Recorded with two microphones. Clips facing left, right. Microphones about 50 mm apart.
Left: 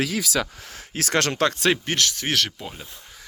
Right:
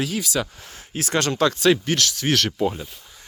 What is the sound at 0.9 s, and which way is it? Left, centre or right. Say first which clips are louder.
Speech: even; left.